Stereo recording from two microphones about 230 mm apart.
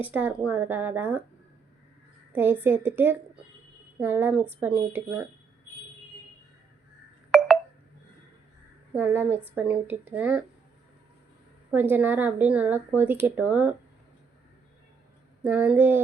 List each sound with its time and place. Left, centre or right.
0.1 s speech: centre
2.3 s speech: centre
7.3 s telephone dialing: centre
9.0 s speech: centre
11.7 s speech: centre
15.4 s speech: centre